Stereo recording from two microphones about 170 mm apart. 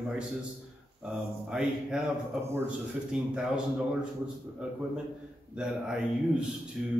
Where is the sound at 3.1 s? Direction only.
5° right (ahead or behind).